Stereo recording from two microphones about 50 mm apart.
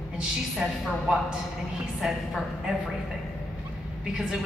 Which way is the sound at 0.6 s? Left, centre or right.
Centre.